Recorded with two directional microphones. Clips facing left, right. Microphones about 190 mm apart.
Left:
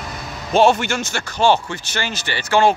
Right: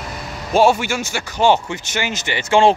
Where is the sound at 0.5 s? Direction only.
10° right (ahead or behind).